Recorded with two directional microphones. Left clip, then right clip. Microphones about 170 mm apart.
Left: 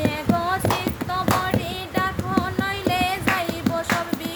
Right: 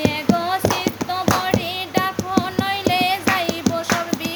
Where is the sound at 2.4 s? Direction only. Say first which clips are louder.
Right 4 dB; 15° left (ahead or behind).